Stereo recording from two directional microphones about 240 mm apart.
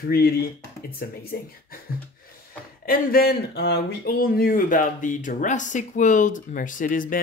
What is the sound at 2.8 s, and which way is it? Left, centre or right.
Speech, left.